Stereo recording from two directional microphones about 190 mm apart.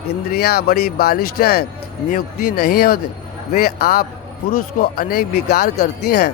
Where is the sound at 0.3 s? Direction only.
55° left (ahead or behind).